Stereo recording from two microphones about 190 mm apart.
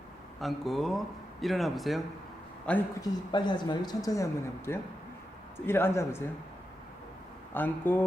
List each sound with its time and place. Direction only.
0.3 s speech: centre (ahead or behind)
3.0 s speech: 25° left (ahead or behind)
7.5 s speech: 10° left (ahead or behind)